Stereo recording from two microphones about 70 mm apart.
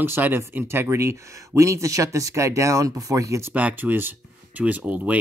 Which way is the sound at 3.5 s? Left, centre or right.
Right.